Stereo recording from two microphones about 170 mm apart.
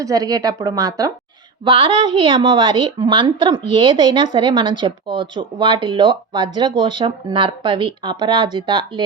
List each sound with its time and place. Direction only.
0.0 s speech: 20° right (ahead or behind)
1.6 s speech: 30° right (ahead or behind)